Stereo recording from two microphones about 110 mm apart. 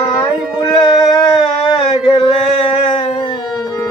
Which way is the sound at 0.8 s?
40° left (ahead or behind).